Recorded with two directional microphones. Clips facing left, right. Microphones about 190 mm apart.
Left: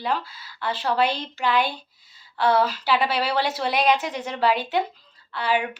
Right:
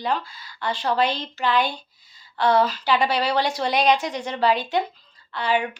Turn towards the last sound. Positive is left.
turn(degrees=5)  # may be behind; listen again after turning